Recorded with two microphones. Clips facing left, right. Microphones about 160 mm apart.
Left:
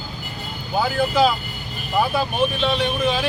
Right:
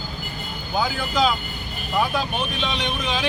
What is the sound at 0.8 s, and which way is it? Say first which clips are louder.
Speech: left 4 dB; 5° left (ahead or behind).